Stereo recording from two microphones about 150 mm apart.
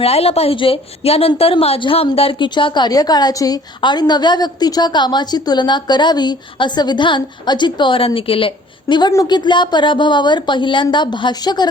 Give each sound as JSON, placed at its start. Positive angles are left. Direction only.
{"t": 0.0, "sound": "a woman's voice", "side_deg": 40}